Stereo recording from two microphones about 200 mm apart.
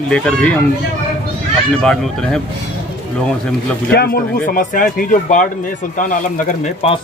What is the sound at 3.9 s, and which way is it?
Speech, 45° left (ahead or behind).